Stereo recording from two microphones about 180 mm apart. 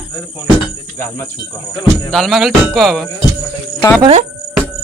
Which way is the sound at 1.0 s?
15° left (ahead or behind).